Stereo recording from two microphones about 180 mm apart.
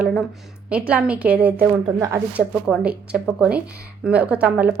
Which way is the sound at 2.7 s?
5° right (ahead or behind).